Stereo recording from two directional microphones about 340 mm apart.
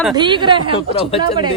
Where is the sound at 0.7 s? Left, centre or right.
Centre.